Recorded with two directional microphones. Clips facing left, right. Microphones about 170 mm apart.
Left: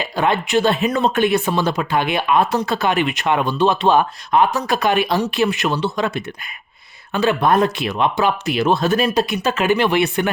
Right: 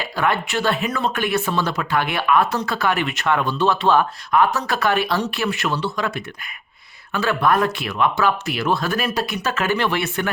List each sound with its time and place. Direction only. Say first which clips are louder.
0.0 s speech: left 3 dB; 20° left (ahead or behind)